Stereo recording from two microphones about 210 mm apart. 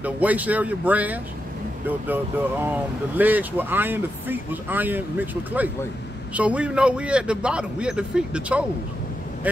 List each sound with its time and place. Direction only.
0.0 s speech: 5° right (ahead or behind)
2.6 s a man's voice: 10° right (ahead or behind)